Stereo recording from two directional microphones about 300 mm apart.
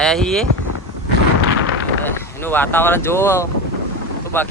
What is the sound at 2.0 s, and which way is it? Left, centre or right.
Speech, centre.